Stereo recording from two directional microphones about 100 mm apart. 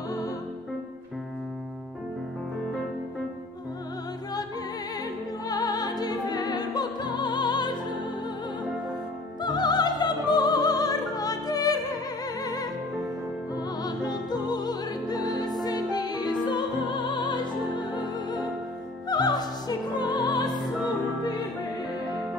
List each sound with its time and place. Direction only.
5.5 s music: 40° left (ahead or behind)
9.4 s music: 45° left (ahead or behind)
13.8 s music: 45° left (ahead or behind)